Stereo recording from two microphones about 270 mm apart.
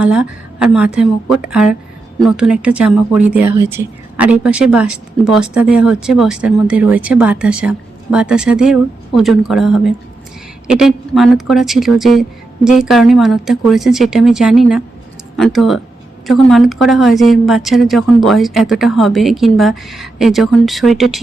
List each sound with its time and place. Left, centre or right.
0.0 s a woman's voice: centre